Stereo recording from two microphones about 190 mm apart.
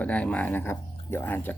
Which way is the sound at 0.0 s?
10° left (ahead or behind).